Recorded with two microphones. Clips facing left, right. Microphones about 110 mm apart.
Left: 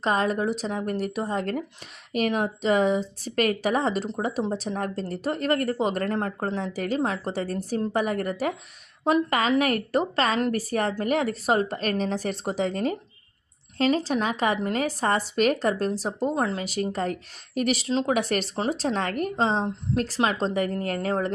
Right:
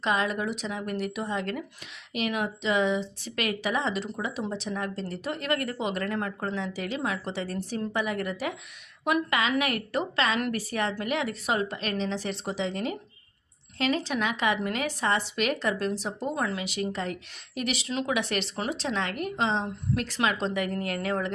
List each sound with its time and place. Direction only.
0.0 s a woman's voice: 40° left (ahead or behind)